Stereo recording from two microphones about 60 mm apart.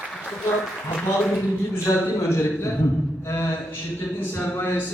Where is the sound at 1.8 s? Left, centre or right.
Left.